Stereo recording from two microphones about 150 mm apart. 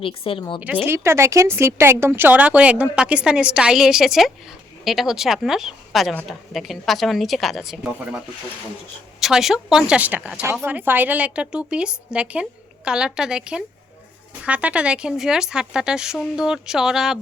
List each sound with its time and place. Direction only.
0.0 s speech: 35° left (ahead or behind)
0.9 s a woman's voice: 15° right (ahead or behind); by 7.8 s centre (ahead or behind)
9.2 s a woman's voice: centre (ahead or behind)